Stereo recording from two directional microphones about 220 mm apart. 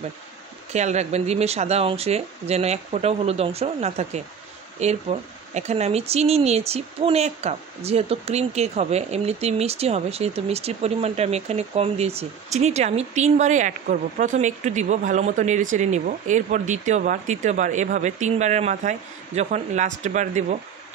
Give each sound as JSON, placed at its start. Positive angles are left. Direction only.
{"t": 0.7, "sound": "speech", "side_deg": -30}